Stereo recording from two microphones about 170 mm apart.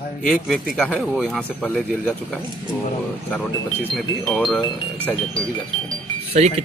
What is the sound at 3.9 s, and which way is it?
Speech, centre (ahead or behind).